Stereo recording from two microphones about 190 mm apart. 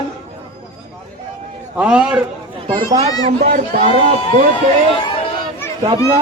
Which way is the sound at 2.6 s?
20° right (ahead or behind).